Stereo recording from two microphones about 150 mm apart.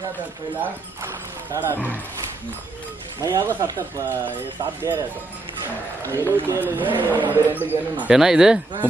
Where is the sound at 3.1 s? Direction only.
15° right (ahead or behind).